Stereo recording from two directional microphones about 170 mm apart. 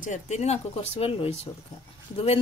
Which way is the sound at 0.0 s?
45° left (ahead or behind).